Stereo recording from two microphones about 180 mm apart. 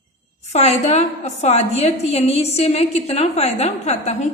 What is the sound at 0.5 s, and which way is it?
A woman's voice, 35° left (ahead or behind).